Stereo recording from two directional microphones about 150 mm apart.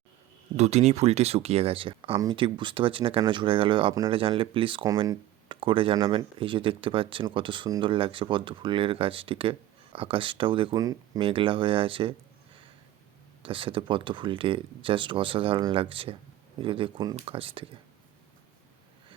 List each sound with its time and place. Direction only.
0.5 s speech: 50° right (ahead or behind)
10.8 s speech: 25° right (ahead or behind)
11.2 s speech: 35° right (ahead or behind)
13.4 s speech: 35° right (ahead or behind)